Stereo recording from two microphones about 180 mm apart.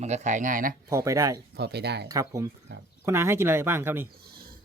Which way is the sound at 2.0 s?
20° right (ahead or behind).